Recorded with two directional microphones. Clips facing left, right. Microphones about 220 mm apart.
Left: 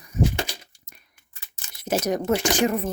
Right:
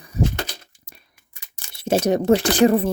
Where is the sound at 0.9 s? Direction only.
30° right (ahead or behind).